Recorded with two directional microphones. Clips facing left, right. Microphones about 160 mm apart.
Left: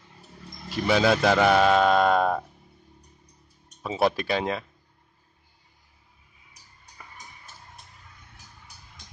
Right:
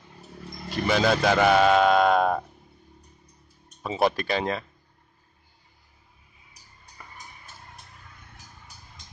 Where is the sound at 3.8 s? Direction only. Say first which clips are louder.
Even; centre (ahead or behind).